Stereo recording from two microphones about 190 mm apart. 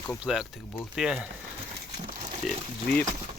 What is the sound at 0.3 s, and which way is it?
Speech, 5° left (ahead or behind).